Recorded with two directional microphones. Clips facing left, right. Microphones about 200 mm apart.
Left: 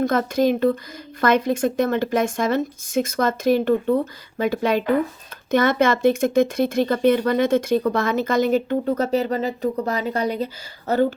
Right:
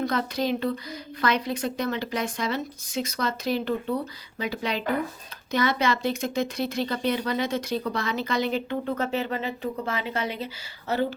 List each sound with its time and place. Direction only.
0.0 s speech: 50° left (ahead or behind)